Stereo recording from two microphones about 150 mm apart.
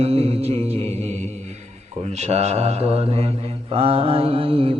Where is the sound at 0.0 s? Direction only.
40° right (ahead or behind).